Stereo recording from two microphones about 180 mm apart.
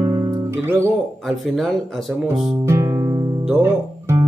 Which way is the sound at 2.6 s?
15° right (ahead or behind).